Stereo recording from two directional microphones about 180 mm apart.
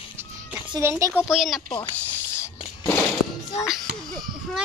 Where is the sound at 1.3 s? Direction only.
Centre (ahead or behind).